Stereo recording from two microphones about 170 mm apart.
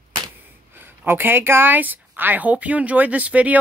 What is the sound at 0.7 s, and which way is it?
A woman's voice, 10° right (ahead or behind).